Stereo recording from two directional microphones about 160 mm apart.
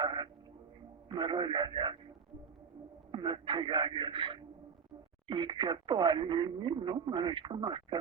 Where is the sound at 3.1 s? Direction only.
30° right (ahead or behind).